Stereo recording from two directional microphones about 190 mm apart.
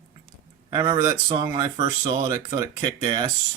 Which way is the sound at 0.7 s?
25° right (ahead or behind).